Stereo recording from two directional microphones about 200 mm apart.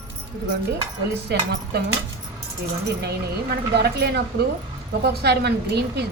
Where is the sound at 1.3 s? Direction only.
55° right (ahead or behind).